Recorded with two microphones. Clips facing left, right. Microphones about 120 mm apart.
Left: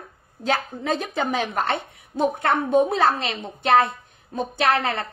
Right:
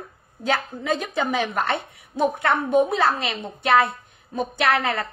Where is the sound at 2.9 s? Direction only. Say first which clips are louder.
Left 1 dB; 40° left (ahead or behind).